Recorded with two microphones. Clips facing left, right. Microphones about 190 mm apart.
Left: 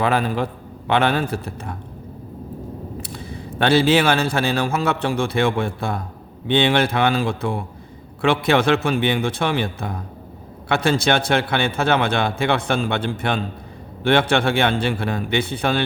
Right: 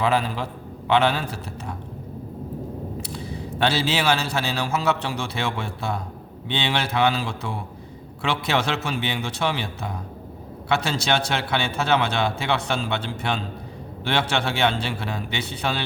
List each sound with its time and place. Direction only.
0.0 s a man's voice: 55° left (ahead or behind)
3.0 s a man's voice: 55° left (ahead or behind)